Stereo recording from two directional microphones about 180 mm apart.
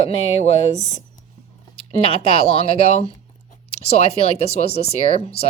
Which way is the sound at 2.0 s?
30° left (ahead or behind).